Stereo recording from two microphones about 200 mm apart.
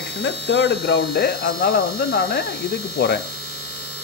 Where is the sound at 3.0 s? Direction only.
55° left (ahead or behind).